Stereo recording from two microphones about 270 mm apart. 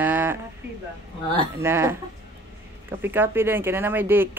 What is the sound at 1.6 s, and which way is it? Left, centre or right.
Speech, centre.